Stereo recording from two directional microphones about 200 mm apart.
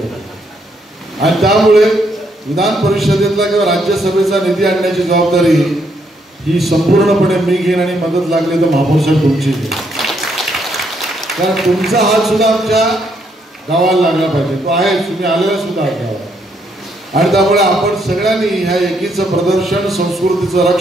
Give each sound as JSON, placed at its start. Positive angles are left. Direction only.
{"t": 1.2, "sound": "a man's voice", "side_deg": 0}
{"t": 17.2, "sound": "a man's voice", "side_deg": 0}